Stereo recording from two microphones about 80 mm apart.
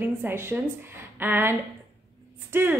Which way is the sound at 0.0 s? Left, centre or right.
Right.